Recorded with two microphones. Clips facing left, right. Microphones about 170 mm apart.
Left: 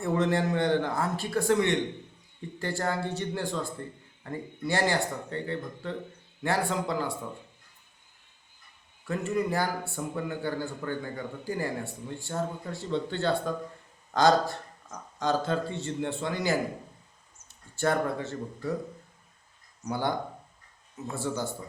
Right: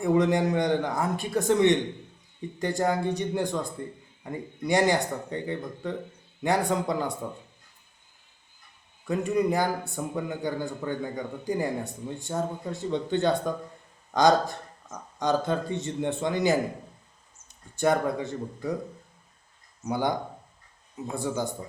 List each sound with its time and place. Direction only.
0.0 s a man's voice: 15° right (ahead or behind)
9.0 s a man's voice: 15° right (ahead or behind)
19.9 s speech: 15° right (ahead or behind)